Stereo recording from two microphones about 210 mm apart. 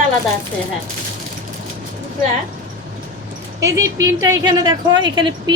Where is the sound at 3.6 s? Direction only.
15° right (ahead or behind).